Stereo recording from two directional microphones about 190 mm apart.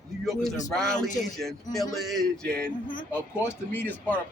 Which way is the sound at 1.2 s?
Centre (ahead or behind).